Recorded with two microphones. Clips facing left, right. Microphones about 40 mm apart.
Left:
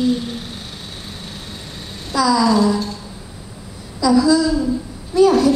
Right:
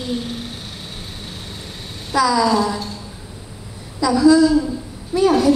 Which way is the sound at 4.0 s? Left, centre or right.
Centre.